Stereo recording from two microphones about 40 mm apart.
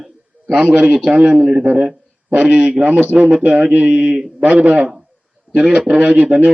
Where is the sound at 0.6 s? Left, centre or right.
Right.